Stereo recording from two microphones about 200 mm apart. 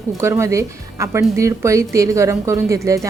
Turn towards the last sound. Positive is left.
turn(degrees=-15)  # may be behind; listen again after turning